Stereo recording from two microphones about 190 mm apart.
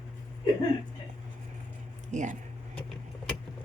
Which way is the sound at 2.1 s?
40° right (ahead or behind).